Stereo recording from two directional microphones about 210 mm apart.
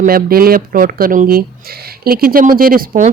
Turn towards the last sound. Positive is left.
turn(degrees=-40)  # may be behind; listen again after turning